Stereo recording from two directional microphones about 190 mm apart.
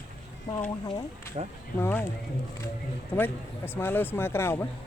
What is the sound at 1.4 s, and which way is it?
Speech, 35° right (ahead or behind).